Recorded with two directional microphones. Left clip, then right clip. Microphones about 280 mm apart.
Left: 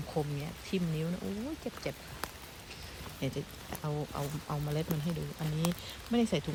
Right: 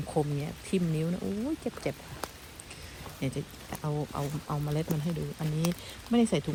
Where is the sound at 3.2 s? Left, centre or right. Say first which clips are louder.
Right 2 dB; centre.